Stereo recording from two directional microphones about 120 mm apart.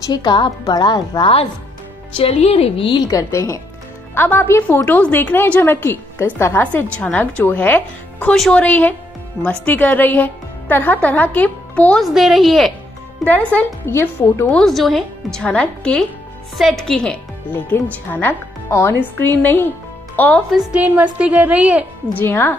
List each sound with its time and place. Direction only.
0.0 s a woman's voice: 35° left (ahead or behind)
2.1 s speech: 60° left (ahead or behind)
3.1 s a woman's voice: 25° left (ahead or behind)
12.0 s a woman's voice: centre (ahead or behind)
13.2 s a woman's voice: 10° left (ahead or behind)
13.8 s speech: 25° left (ahead or behind)
14.5 s a woman's voice: centre (ahead or behind)
18.1 s a woman's voice: 20° left (ahead or behind)
20.4 s a woman's voice: 5° right (ahead or behind)
22.1 s a woman's voice: 15° left (ahead or behind)